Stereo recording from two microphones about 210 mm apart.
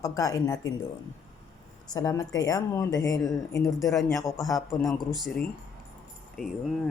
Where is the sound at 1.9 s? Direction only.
15° left (ahead or behind).